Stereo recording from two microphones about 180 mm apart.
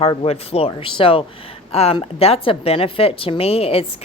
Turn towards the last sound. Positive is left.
turn(degrees=35)  # may be behind; listen again after turning